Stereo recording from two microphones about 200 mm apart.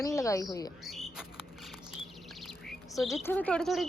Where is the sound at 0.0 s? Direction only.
15° left (ahead or behind).